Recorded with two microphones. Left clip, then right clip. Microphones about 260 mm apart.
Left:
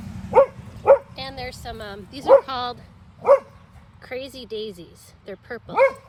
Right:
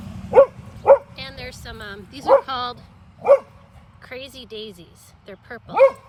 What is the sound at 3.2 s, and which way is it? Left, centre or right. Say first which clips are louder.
Dog: right 1 dB; right.